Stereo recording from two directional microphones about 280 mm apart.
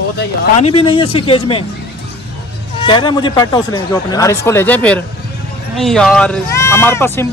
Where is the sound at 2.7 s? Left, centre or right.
Centre.